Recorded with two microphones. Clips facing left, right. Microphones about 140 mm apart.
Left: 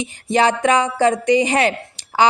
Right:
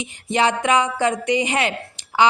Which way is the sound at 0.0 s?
35° left (ahead or behind).